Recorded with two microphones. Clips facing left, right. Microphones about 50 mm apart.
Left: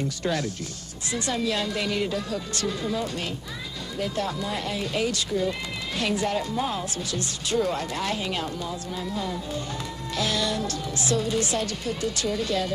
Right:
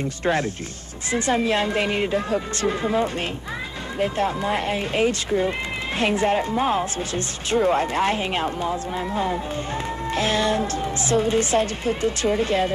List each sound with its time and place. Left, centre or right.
0.2 s a woman's voice: right